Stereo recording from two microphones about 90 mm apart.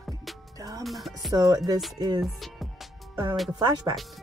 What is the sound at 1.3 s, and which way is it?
Speech, 45° right (ahead or behind).